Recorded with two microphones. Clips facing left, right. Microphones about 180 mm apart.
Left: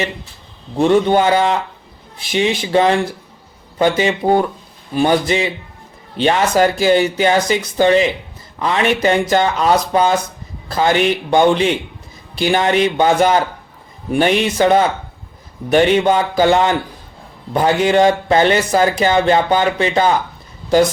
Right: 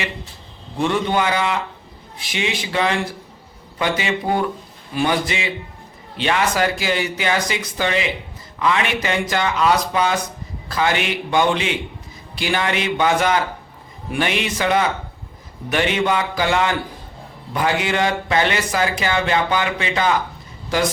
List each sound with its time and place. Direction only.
0.8 s speech: 40° left (ahead or behind)